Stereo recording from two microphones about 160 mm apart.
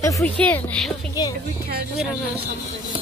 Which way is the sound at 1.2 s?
25° left (ahead or behind).